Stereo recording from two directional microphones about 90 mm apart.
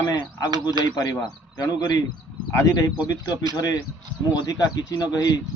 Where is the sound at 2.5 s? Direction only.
35° left (ahead or behind).